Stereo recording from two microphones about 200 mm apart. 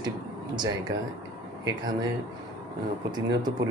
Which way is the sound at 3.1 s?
20° right (ahead or behind).